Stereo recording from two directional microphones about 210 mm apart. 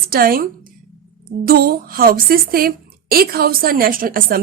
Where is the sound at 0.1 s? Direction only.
45° right (ahead or behind).